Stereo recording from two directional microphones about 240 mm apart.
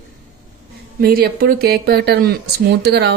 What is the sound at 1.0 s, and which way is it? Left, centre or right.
A woman's voice, right.